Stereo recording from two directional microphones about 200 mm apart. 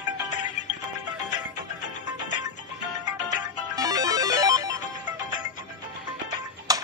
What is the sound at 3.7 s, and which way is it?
Music, 15° right (ahead or behind).